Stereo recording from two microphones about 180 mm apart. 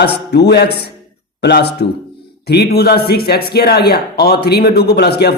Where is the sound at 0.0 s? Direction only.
65° left (ahead or behind).